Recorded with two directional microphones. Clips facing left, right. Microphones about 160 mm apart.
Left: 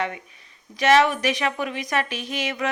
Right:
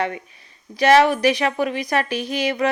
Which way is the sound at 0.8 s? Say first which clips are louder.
Right 4 dB; 35° right (ahead or behind).